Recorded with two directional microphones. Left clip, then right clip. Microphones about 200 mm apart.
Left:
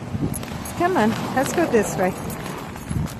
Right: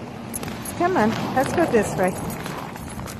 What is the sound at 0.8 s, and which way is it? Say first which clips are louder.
Speech: even; 30° left (ahead or behind).